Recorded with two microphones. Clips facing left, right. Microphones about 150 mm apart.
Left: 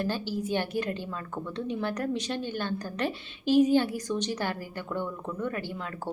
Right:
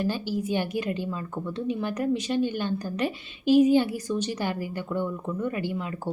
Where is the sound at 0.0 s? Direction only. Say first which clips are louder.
Right 3 dB; 10° right (ahead or behind).